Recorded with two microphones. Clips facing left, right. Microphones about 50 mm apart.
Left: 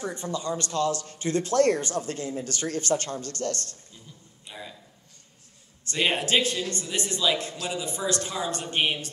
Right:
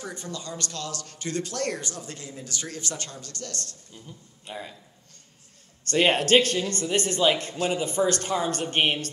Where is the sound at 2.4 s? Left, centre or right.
Left.